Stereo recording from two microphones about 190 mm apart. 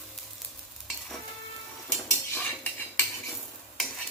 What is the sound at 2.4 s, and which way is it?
Cutlery, 10° left (ahead or behind).